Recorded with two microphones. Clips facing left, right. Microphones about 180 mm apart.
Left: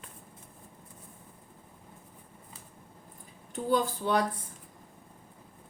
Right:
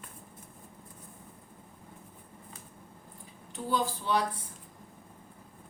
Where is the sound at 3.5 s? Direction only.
45° left (ahead or behind).